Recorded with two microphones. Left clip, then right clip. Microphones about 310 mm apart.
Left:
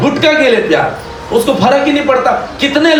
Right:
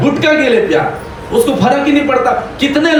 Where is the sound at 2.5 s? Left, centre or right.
Left.